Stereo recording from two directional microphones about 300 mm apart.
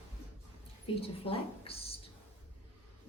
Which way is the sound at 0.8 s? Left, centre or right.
Centre.